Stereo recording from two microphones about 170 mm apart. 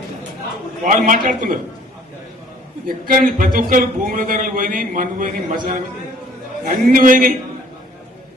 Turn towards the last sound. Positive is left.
turn(degrees=-55)  # may be behind; listen again after turning